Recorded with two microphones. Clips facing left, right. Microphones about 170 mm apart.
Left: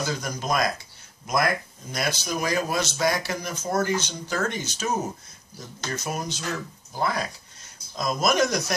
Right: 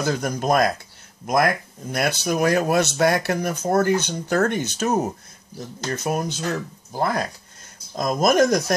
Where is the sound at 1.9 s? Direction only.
60° right (ahead or behind).